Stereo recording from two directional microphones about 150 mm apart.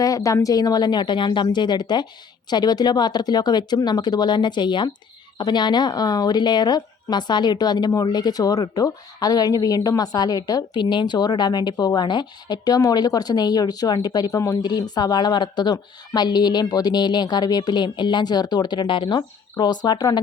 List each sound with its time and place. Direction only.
0.0 s speech: 20° left (ahead or behind)